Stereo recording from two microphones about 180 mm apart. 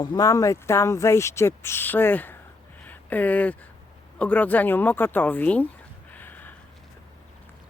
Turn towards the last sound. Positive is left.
turn(degrees=10)  # may be behind; listen again after turning